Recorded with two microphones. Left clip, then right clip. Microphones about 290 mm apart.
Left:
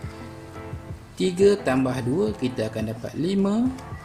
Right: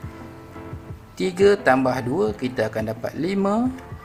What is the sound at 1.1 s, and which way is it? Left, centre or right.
Speech, right.